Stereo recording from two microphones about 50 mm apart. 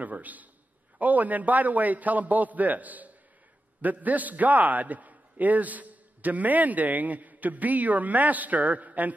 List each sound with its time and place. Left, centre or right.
0.0 s a man's voice: right